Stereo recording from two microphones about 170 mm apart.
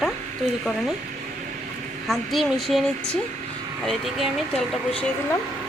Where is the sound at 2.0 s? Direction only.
Centre (ahead or behind).